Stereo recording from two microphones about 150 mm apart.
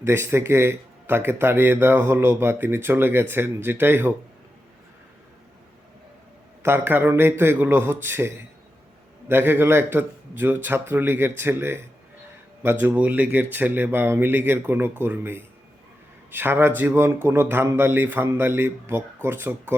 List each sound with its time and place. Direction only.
0.0 s speech: 15° right (ahead or behind)
6.6 s speech: 15° right (ahead or behind)
9.3 s speech: 15° right (ahead or behind)